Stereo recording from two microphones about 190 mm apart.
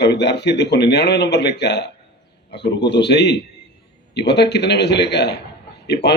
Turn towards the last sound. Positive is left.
turn(degrees=65)  # may be behind; listen again after turning